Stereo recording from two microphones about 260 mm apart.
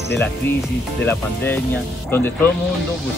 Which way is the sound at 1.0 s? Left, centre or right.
Centre.